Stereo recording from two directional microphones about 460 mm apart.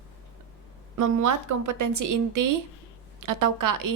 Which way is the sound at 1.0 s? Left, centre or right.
Right.